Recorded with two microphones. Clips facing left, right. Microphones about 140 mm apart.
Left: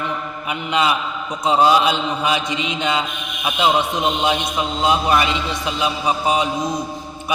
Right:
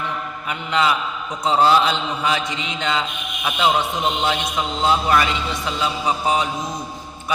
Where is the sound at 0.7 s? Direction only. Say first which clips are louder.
Even; 15° left (ahead or behind).